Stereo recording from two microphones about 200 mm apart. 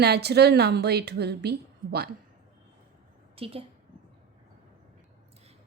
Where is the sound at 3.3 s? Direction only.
30° right (ahead or behind).